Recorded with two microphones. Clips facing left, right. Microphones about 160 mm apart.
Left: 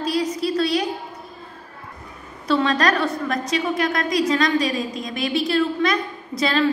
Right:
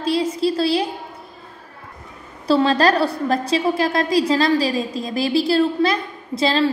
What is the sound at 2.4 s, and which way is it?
A woman's voice, 30° right (ahead or behind).